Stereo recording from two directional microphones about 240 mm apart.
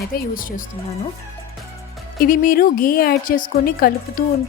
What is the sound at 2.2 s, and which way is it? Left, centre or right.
A woman's voice, left.